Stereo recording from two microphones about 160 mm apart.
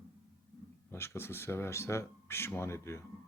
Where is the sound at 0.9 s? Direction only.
15° left (ahead or behind).